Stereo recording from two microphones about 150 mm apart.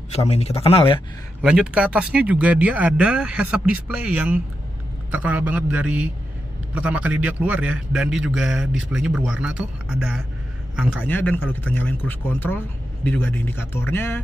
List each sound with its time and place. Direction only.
0.1 s speech: 45° left (ahead or behind)
1.4 s a man's voice: 5° right (ahead or behind)
11.1 s speech: 10° left (ahead or behind)